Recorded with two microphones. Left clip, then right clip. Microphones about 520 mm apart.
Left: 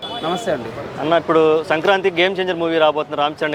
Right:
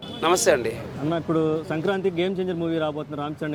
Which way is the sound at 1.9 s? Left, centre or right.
Left.